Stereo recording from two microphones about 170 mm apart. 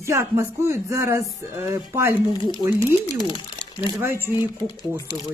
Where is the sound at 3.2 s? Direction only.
25° left (ahead or behind).